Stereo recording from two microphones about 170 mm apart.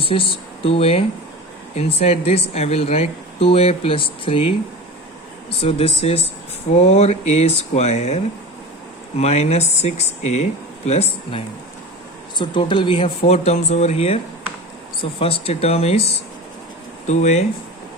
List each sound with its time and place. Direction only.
0.1 s speech: 35° left (ahead or behind)
5.5 s speech: 35° left (ahead or behind)
15.2 s speech: 35° left (ahead or behind)